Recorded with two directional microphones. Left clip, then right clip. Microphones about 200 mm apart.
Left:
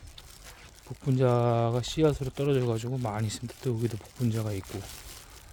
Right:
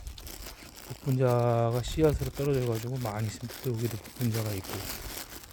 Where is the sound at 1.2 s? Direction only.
20° left (ahead or behind).